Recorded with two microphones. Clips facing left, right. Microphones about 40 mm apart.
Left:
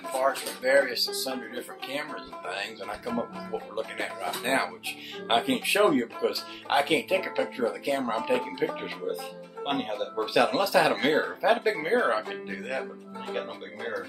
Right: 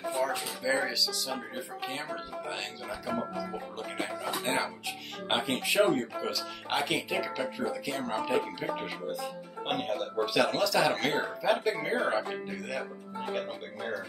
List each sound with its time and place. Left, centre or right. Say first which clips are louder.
0.2 s speech: left 6 dB; centre
1.3 s speech: left 2 dB; centre
3.7 s speech: left 3 dB; centre
11.1 s speech: left 4 dB; centre
12.5 s speech: left 3 dB; centre